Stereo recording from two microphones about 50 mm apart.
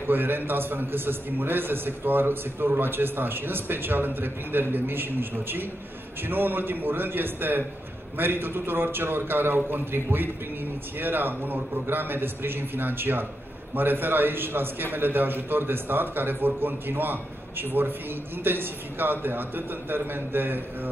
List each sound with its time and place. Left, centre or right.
0.0 s a man's voice: right